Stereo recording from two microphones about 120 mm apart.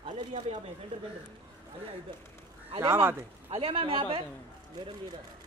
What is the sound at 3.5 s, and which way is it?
Speech, 45° right (ahead or behind).